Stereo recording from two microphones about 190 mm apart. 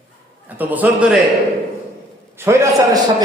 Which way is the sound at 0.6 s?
10° right (ahead or behind).